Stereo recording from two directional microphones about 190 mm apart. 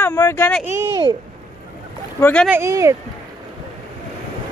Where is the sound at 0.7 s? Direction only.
20° right (ahead or behind).